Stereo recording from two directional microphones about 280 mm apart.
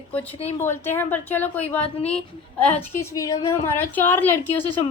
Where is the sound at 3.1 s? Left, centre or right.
Centre.